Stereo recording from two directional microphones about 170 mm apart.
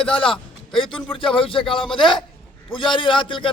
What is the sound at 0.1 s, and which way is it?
A man's voice, 30° left (ahead or behind).